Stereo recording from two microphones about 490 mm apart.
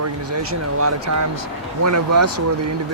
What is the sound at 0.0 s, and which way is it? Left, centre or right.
Speech, right.